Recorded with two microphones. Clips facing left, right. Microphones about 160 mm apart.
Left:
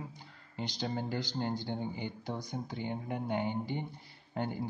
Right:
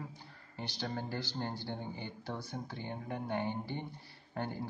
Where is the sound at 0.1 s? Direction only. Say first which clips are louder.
Left 2 dB; 15° left (ahead or behind).